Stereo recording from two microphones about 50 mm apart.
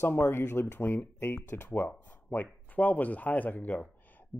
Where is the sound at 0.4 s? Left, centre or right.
Left.